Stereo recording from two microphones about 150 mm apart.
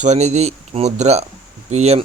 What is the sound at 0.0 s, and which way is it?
Speech, 50° right (ahead or behind).